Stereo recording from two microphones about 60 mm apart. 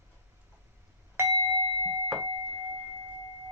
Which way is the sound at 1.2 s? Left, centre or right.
Right.